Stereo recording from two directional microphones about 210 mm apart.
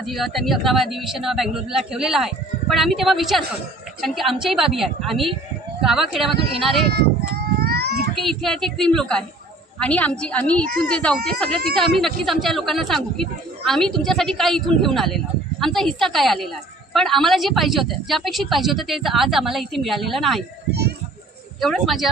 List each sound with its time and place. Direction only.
0.0 s a woman's voice: centre (ahead or behind)
7.6 s a sound: 50° right (ahead or behind)
8.2 s a woman's voice: centre (ahead or behind)
21.5 s a woman's voice: centre (ahead or behind)